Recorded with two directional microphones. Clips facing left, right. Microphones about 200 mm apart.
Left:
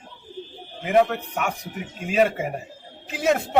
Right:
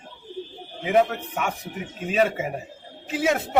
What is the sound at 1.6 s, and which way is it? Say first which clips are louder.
Speech: right 1 dB; centre (ahead or behind).